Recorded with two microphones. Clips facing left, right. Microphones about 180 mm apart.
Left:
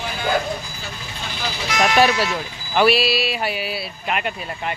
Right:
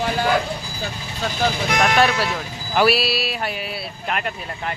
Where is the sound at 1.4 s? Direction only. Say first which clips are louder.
Right 2 dB; 55° right (ahead or behind).